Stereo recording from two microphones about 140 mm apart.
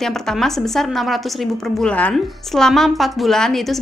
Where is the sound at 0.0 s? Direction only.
5° left (ahead or behind).